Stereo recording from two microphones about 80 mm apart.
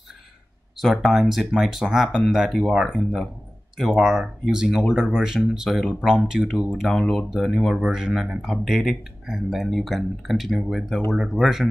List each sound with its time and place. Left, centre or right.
0.7 s speech: centre
6.9 s speech: centre
7.2 s speech: centre